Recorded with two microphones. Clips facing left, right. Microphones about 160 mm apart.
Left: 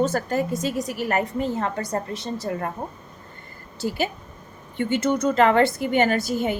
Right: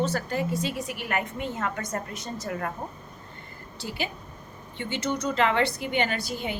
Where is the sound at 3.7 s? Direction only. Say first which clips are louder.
Left 8 dB; 45° left (ahead or behind).